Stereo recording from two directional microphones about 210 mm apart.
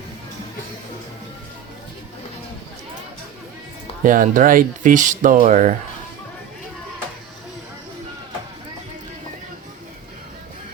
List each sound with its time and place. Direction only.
4.0 s speech: 40° right (ahead or behind)